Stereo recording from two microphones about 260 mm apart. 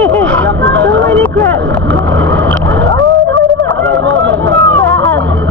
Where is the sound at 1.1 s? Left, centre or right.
Centre.